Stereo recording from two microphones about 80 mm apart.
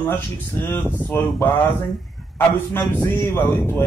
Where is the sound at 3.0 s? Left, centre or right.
Left.